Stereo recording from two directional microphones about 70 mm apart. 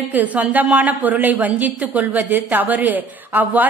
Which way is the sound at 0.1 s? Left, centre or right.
Right.